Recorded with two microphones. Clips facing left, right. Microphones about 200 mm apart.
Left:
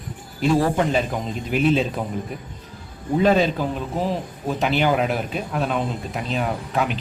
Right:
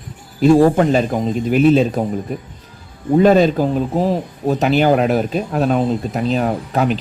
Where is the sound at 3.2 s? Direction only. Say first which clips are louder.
Right 5 dB; 45° right (ahead or behind).